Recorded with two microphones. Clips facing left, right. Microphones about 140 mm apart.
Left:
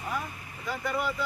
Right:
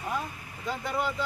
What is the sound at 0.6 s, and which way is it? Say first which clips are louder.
Speech: even; 25° right (ahead or behind).